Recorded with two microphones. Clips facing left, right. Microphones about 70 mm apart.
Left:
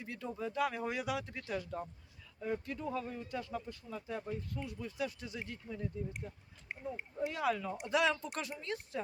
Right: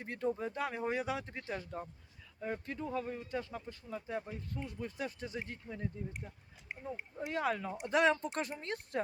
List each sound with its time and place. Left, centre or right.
0.0 s speech: right